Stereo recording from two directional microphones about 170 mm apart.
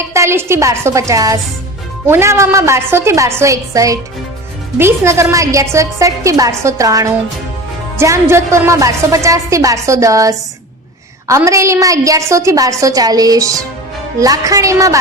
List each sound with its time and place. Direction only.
0.1 s a woman's voice: 15° right (ahead or behind)